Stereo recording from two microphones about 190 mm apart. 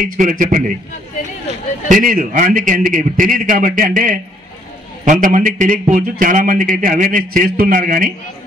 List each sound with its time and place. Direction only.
0.0 s a man's voice: 45° right (ahead or behind)
1.9 s a man's voice: 45° right (ahead or behind)